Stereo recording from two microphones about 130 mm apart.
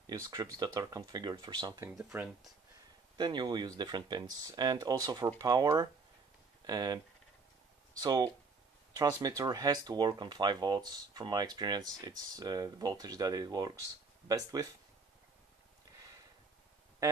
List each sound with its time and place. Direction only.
0.0 s speech: 30° right (ahead or behind)
1.8 s speech: 25° right (ahead or behind)
2.0 s speech: 5° right (ahead or behind)
3.2 s speech: 35° right (ahead or behind)
8.0 s speech: 30° right (ahead or behind)